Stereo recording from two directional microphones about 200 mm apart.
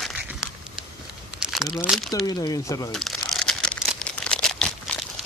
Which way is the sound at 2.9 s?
Centre (ahead or behind).